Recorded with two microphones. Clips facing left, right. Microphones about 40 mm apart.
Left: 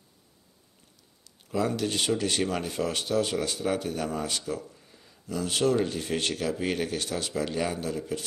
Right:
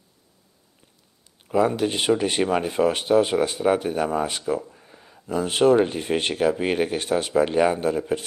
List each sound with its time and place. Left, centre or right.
1.5 s speech: right